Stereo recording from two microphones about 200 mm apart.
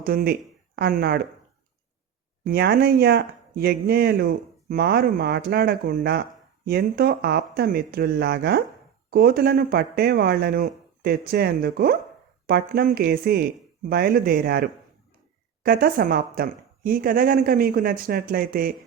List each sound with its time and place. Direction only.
0.0 s speech: 50° right (ahead or behind)
2.4 s speech: 50° right (ahead or behind)